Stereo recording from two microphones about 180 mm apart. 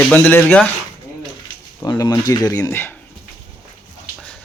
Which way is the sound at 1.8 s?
20° left (ahead or behind).